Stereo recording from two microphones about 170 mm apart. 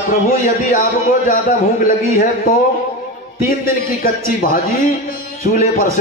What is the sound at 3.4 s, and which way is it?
A man's voice, 60° left (ahead or behind).